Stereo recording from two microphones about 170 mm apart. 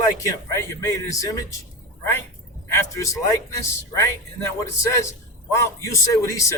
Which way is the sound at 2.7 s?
15° left (ahead or behind).